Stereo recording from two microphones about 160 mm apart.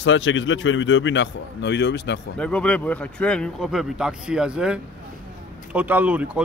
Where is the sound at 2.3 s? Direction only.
5° left (ahead or behind).